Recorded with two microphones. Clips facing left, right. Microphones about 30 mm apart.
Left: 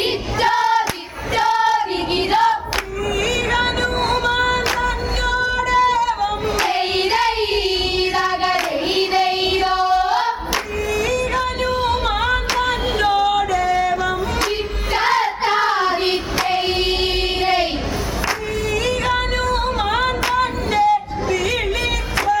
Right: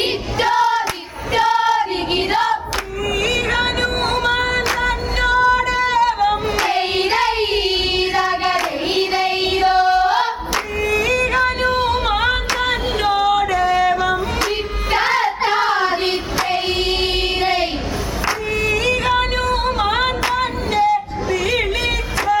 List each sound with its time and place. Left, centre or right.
0.4 s hands: centre
1.4 s child singing: centre
3.5 s music: centre
5.5 s singing: centre
6.9 s child singing: centre
7.9 s music: centre
9.9 s singing: centre
10.9 s music: right
11.7 s singing: centre
13.4 s yodeling: right
14.9 s child singing: centre
16.0 s music: centre
18.7 s music: centre